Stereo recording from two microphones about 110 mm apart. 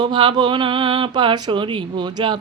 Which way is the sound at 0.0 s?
45° right (ahead or behind).